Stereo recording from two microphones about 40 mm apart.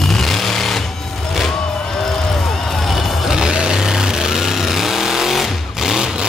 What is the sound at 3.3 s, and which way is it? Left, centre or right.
Vehicle, centre.